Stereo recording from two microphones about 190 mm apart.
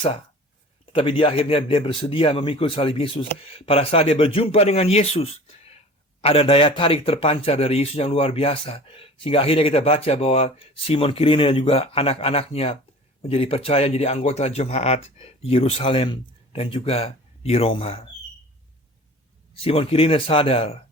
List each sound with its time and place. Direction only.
0.9 s a man's voice: 30° left (ahead or behind)
19.5 s speech: 30° left (ahead or behind)